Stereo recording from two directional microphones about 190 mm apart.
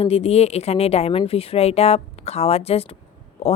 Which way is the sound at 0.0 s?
30° left (ahead or behind).